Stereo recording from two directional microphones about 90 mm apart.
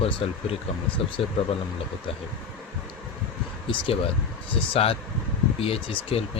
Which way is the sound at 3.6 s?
90° left.